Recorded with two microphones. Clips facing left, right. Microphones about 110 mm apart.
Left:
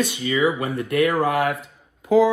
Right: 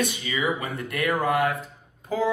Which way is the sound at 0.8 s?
70° left (ahead or behind).